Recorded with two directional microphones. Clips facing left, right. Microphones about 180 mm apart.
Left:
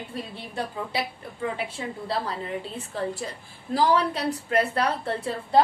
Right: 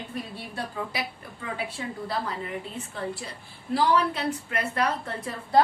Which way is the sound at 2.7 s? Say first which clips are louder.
Left 3 dB; 35° left (ahead or behind).